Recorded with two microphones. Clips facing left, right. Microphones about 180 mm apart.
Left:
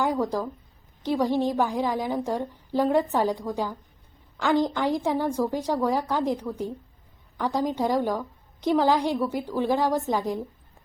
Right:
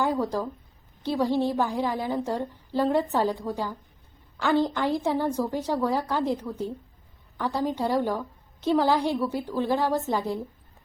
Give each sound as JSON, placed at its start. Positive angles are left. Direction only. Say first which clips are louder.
{"t": 0.0, "sound": "a woman's voice", "louder": "left 1 dB", "side_deg": 15}